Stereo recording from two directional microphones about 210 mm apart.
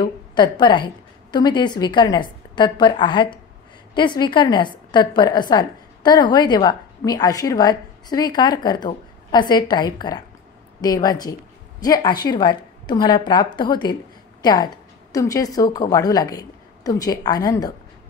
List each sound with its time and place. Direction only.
0.0 s a woman's voice: 20° left (ahead or behind)